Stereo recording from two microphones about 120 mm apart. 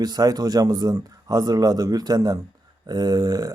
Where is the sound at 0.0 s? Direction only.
35° right (ahead or behind).